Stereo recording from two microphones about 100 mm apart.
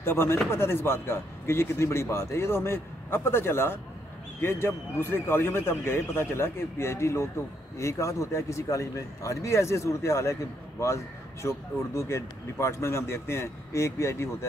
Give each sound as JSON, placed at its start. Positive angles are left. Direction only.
{"t": 0.0, "sound": "a man's voice", "side_deg": 25}